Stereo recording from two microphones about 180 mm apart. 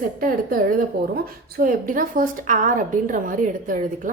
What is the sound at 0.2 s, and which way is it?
A woman's voice, 50° right (ahead or behind).